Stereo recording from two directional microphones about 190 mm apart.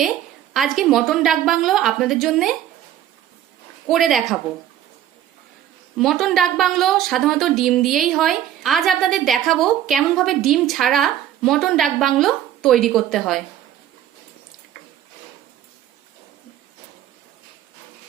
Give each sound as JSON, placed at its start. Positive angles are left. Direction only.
{"t": 0.5, "sound": "speech", "side_deg": 0}
{"t": 3.8, "sound": "speech", "side_deg": 0}
{"t": 6.0, "sound": "speech", "side_deg": 0}